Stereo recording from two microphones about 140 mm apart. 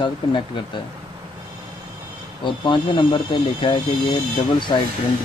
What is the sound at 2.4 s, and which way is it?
Speech, 35° left (ahead or behind).